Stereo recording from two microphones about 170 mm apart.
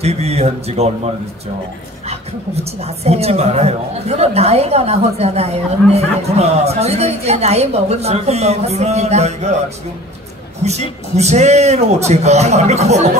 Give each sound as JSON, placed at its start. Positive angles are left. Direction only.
{"t": 0.0, "sound": "a woman's voice", "side_deg": -40}
{"t": 2.0, "sound": "a woman's voice", "side_deg": -40}
{"t": 10.6, "sound": "a woman's voice", "side_deg": -40}